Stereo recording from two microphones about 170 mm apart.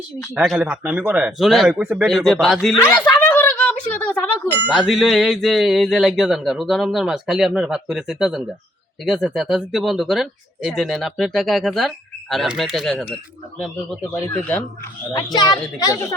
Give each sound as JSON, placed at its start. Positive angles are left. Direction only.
{"t": 0.3, "sound": "speech", "side_deg": 0}
{"t": 0.6, "sound": "speech", "side_deg": -10}
{"t": 1.7, "sound": "speech", "side_deg": -15}
{"t": 2.0, "sound": "speech", "side_deg": 0}
{"t": 2.8, "sound": "speech", "side_deg": 10}
{"t": 3.1, "sound": "a sound", "side_deg": 10}
{"t": 4.7, "sound": "speech", "side_deg": 0}
{"t": 15.1, "sound": "a child's voice", "side_deg": 25}